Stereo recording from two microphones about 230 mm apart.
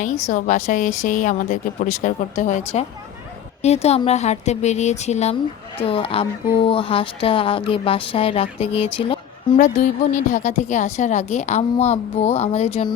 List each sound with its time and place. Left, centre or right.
0.0 s a woman's voice: left